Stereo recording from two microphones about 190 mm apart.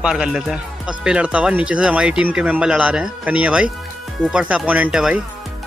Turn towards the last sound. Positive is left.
turn(degrees=-5)  # may be behind; listen again after turning